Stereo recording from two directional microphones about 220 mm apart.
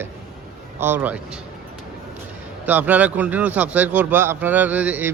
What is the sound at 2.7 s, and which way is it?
Speech, 10° right (ahead or behind).